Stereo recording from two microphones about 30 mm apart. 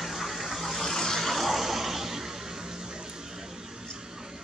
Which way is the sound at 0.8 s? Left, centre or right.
Centre.